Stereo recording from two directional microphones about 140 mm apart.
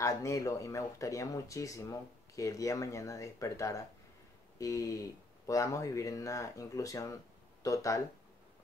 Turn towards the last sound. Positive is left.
turn(degrees=25)  # may be behind; listen again after turning